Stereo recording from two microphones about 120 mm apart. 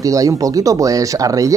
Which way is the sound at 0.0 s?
30° right (ahead or behind).